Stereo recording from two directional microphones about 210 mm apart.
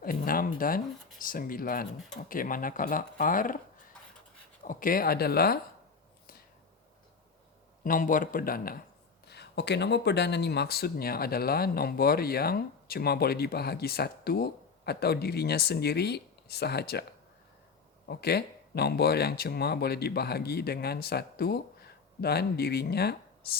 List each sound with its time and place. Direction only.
0.0 s speech: 45° left (ahead or behind)
4.6 s speech: 40° left (ahead or behind)
7.9 s speech: 40° left (ahead or behind)